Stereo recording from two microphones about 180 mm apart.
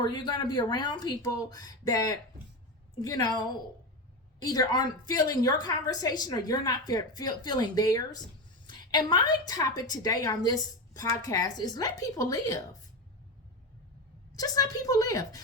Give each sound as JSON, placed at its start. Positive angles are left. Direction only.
{"t": 0.0, "sound": "a woman's voice", "side_deg": 25}
{"t": 4.5, "sound": "a woman's voice", "side_deg": 20}
{"t": 14.3, "sound": "a woman's voice", "side_deg": 20}